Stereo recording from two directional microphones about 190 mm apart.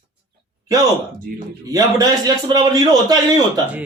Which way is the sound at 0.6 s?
20° right (ahead or behind).